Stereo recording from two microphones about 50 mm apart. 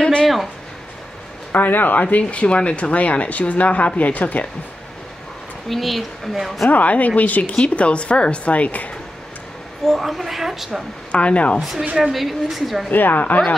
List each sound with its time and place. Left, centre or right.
0.0 s a sound: centre
1.5 s speech: left
5.7 s speech: centre
6.7 s speech: left
9.8 s speech: centre
11.1 s speech: left
12.0 s speech: centre
12.9 s a woman's voice: left